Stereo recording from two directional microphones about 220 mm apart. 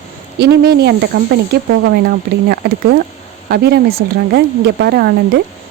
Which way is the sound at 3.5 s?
45° right (ahead or behind).